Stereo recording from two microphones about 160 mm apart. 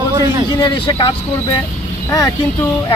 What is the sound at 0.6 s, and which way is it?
Speech, 30° left (ahead or behind).